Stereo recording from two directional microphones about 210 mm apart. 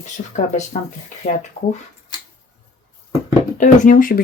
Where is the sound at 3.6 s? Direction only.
40° left (ahead or behind).